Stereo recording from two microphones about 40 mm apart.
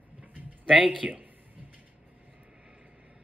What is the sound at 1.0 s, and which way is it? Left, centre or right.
Speech, right.